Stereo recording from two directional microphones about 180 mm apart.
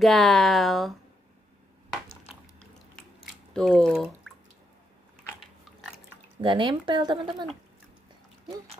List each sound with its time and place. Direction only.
0.0 s speech: centre (ahead or behind)
3.5 s speech: 5° left (ahead or behind)
6.4 s speech: 25° right (ahead or behind)